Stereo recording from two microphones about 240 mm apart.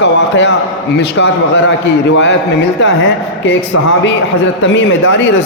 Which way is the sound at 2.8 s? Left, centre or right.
Left.